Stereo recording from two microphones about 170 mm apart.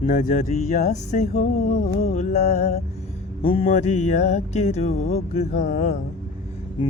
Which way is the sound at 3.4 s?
35° left (ahead or behind).